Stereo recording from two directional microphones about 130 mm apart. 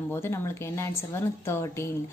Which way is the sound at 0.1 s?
20° left (ahead or behind).